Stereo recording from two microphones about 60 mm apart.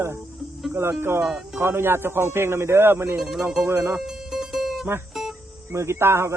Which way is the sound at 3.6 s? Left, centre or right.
Right.